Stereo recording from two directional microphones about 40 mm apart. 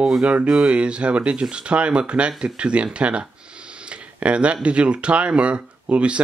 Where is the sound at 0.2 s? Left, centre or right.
Right.